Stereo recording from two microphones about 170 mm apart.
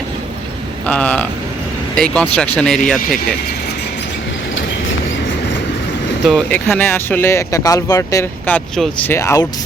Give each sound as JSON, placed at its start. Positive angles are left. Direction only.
{"t": 0.9, "sound": "speech", "side_deg": 10}
{"t": 6.2, "sound": "speech", "side_deg": 5}
{"t": 9.1, "sound": "speech", "side_deg": 20}